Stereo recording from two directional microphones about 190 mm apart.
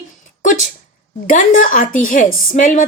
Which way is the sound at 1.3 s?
45° left (ahead or behind).